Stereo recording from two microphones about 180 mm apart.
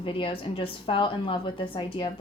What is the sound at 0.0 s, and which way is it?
A woman's voice, 30° left (ahead or behind).